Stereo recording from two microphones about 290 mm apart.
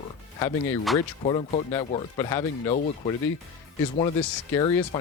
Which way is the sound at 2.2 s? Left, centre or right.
Centre.